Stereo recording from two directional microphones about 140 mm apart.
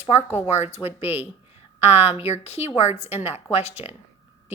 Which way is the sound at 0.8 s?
10° right (ahead or behind).